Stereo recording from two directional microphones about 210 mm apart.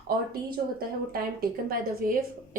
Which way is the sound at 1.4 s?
45° right (ahead or behind).